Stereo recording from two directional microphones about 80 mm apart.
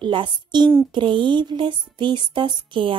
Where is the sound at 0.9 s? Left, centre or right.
Right.